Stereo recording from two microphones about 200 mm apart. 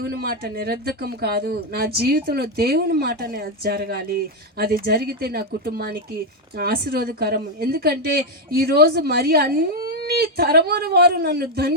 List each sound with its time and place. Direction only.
0.0 s speech: 50° right (ahead or behind)